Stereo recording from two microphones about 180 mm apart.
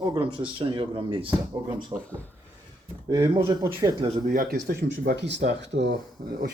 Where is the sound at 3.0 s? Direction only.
25° right (ahead or behind).